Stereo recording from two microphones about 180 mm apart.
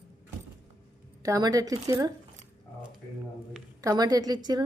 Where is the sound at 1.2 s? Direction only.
20° right (ahead or behind).